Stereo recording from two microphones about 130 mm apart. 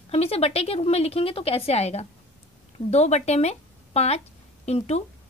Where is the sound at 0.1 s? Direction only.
50° left (ahead or behind).